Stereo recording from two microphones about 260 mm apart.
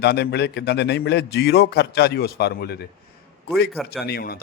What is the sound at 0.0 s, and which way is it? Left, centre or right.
Speech, left.